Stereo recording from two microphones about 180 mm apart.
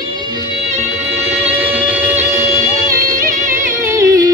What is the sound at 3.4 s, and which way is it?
Music, 45° right (ahead or behind).